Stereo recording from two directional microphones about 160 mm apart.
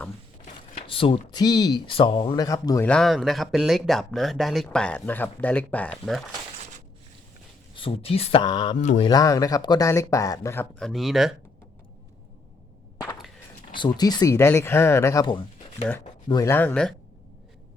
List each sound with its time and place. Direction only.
0.9 s speech: 35° left (ahead or behind)
2.8 s speech: 5° left (ahead or behind)
7.8 s speech: 35° left (ahead or behind)
8.8 s speech: 50° left (ahead or behind)
9.0 s speech: 20° left (ahead or behind)
10.8 s speech: centre (ahead or behind)
13.7 s speech: 25° left (ahead or behind); by 16.9 s 10° left (ahead or behind)